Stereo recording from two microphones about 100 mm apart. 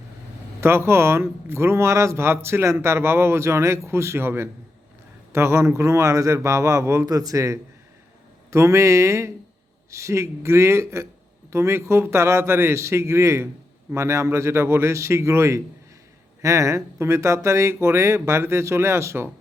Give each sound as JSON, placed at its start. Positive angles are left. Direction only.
{"t": 0.6, "sound": "a man's voice", "side_deg": -25}